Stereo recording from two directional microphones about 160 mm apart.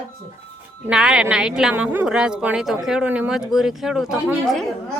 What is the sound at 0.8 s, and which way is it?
Speech, 5° right (ahead or behind).